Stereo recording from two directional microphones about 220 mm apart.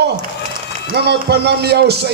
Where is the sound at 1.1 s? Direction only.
50° right (ahead or behind).